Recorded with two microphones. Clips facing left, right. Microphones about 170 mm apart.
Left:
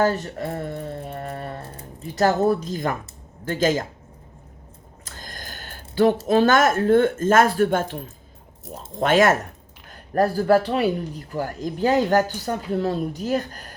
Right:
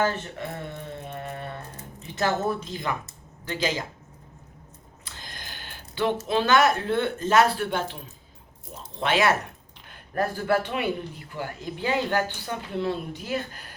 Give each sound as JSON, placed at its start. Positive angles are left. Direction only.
{"t": 0.0, "sound": "music", "side_deg": 40}
{"t": 3.4, "sound": "speech", "side_deg": 45}
{"t": 5.0, "sound": "a sound", "side_deg": 45}
{"t": 6.2, "sound": "a man's voice", "side_deg": 45}